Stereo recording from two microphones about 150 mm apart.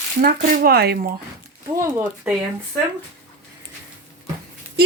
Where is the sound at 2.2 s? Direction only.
10° right (ahead or behind).